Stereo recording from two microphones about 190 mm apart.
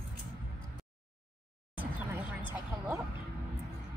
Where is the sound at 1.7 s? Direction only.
10° right (ahead or behind).